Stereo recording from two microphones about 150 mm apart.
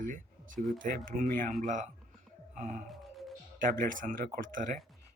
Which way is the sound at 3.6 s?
65° right (ahead or behind).